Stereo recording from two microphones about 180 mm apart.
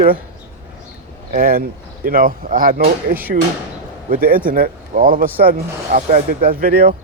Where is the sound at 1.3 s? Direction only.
55° right (ahead or behind).